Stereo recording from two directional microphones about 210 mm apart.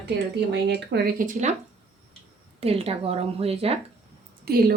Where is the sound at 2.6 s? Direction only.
30° right (ahead or behind).